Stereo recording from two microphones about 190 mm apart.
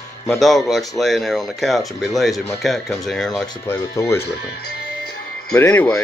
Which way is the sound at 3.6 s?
15° left (ahead or behind).